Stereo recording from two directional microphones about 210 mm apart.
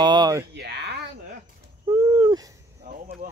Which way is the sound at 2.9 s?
45° right (ahead or behind).